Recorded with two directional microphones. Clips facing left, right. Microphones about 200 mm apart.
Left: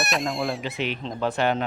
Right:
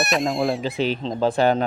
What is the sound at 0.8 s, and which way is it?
Speech, 35° right (ahead or behind).